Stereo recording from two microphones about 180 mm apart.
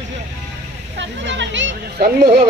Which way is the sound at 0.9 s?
80° right.